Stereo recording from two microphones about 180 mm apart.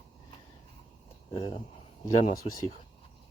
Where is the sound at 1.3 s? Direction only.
25° left (ahead or behind).